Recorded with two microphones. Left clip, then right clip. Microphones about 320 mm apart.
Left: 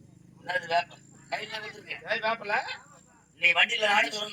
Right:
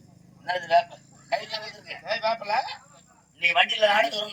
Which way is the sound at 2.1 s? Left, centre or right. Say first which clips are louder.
Right 3 dB; centre.